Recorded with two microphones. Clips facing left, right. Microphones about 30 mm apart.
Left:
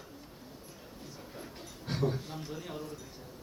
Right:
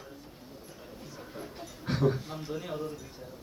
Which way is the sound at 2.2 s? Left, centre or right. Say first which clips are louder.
Right 4 dB; centre.